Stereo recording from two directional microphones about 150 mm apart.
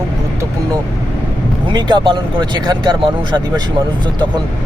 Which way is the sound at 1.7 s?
30° right (ahead or behind).